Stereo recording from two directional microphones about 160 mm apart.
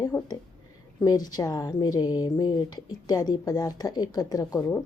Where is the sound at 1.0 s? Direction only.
25° left (ahead or behind).